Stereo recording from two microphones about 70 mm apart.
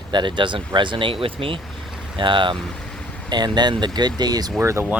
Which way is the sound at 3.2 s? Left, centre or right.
Right.